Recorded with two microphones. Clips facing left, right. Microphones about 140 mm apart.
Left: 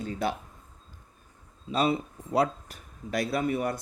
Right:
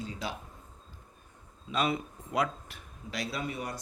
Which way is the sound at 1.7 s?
30° left (ahead or behind).